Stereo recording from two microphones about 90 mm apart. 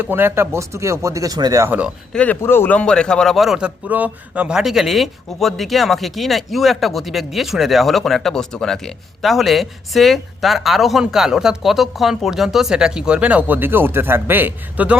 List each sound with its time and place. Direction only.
0.0 s speech: 25° right (ahead or behind); by 1.6 s 45° right (ahead or behind)
1.6 s speech: 20° right (ahead or behind)
2.1 s a man's voice: 15° left (ahead or behind)
2.7 s a man's voice: 10° left (ahead or behind)
3.8 s speech: 15° right (ahead or behind)